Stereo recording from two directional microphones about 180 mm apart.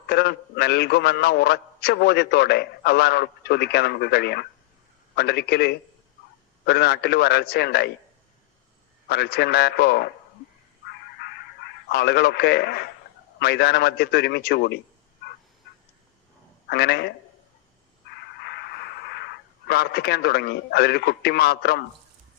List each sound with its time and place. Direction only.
0.1 s a man's voice: 65° left (ahead or behind)
9.0 s a man's voice: 65° left (ahead or behind)
11.2 s a sound: 65° left (ahead or behind)
13.4 s a man's voice: 65° left (ahead or behind)
16.6 s a man's voice: 65° left (ahead or behind)
18.1 s radio: 65° left (ahead or behind)